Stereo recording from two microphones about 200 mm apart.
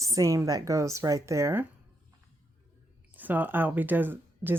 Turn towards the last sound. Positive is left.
turn(degrees=-10)  # may be behind; listen again after turning